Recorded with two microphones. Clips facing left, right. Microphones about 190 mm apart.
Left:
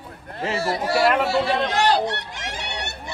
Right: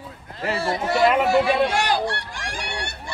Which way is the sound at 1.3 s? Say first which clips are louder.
Right 3 dB; 15° right (ahead or behind).